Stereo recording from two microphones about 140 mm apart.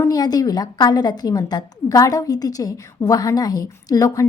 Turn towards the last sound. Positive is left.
turn(degrees=25)  # may be behind; listen again after turning